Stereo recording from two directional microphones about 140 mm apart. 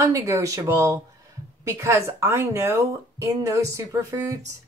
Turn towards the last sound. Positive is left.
turn(degrees=-25)  # may be behind; listen again after turning